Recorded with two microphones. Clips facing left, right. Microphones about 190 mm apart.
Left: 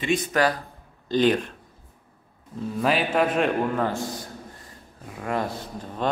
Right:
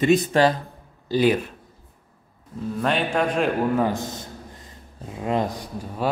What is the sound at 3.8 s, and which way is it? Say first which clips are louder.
A man's voice: right 2 dB; 20° right (ahead or behind).